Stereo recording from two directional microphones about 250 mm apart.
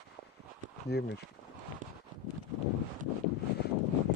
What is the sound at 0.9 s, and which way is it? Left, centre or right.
Speech, left.